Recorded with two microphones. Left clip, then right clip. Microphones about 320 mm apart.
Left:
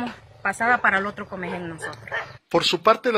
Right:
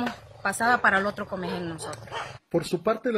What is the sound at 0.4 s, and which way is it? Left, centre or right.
A woman's voice, centre.